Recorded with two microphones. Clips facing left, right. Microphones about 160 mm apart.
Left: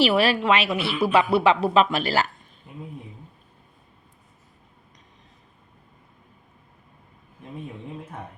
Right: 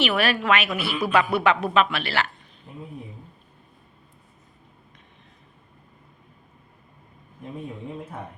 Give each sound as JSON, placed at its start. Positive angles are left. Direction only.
{"t": 0.0, "sound": "a woman's voice", "side_deg": 30}